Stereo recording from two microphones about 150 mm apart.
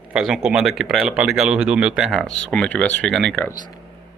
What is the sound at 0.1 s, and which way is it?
Speech, 5° right (ahead or behind).